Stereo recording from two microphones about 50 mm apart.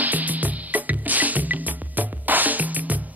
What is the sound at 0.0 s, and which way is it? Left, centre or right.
Music, right.